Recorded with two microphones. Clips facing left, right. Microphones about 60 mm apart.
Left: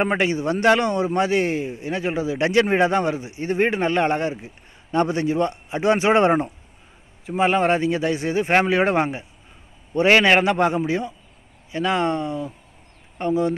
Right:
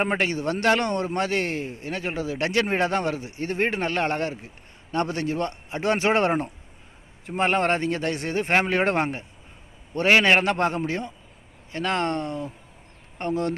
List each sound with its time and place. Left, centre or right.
0.0 s a man's voice: centre
7.2 s a man's voice: centre
10.2 s a man's voice: centre